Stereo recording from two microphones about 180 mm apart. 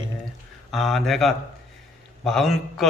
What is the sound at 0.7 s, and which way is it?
A man's voice, centre (ahead or behind).